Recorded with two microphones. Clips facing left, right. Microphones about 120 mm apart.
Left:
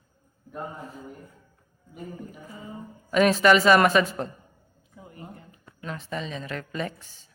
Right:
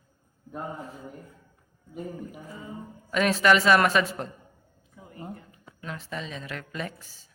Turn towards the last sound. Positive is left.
turn(degrees=0)  # may be behind; listen again after turning